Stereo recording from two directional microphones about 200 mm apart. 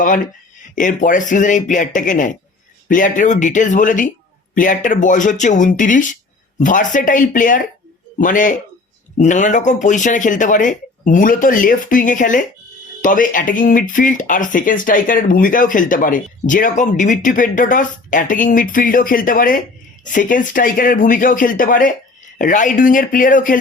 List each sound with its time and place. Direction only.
0.8 s speech: 40° left (ahead or behind)